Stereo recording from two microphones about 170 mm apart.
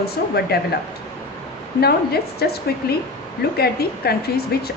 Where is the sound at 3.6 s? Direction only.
65° left (ahead or behind).